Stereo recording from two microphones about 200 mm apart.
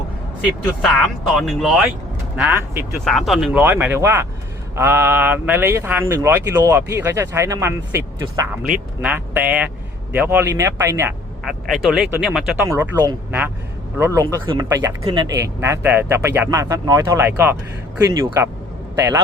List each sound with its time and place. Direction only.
1.3 s speech: centre (ahead or behind)
11.4 s speech: centre (ahead or behind); by 19.2 s 15° right (ahead or behind)